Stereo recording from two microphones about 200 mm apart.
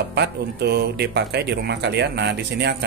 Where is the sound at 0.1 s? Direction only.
55° right (ahead or behind).